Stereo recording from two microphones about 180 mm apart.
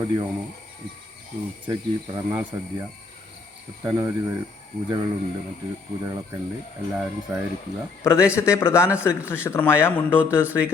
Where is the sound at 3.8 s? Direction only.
20° right (ahead or behind).